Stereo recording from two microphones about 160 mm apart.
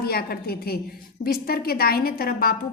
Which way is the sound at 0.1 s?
70° left (ahead or behind).